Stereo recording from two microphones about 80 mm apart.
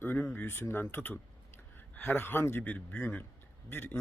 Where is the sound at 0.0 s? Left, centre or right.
Left.